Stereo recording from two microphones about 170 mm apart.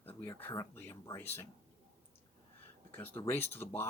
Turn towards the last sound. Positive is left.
turn(degrees=15)  # may be behind; listen again after turning